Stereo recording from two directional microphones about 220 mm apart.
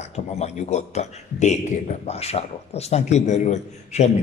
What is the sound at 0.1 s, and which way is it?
A man's voice, 30° left (ahead or behind).